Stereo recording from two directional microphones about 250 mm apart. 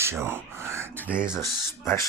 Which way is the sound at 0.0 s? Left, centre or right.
Centre.